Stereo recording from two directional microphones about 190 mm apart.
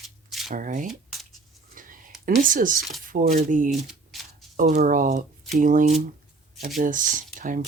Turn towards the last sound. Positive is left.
turn(degrees=-45)  # may be behind; listen again after turning